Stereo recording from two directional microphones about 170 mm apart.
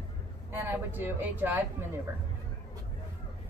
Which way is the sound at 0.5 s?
10° right (ahead or behind).